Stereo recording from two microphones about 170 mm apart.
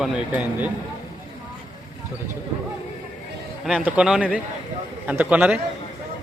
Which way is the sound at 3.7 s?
5° right (ahead or behind).